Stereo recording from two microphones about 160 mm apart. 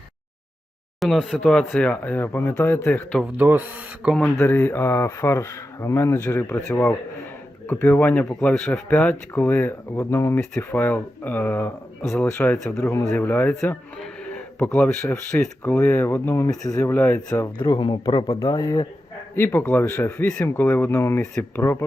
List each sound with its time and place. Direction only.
0.9 s speech: centre (ahead or behind)
3.3 s speech: 10° right (ahead or behind)
4.4 s speech: 10° left (ahead or behind)
17.7 s speech: 30° left (ahead or behind); by 21.6 s 5° left (ahead or behind)
21.6 s speech: 15° left (ahead or behind)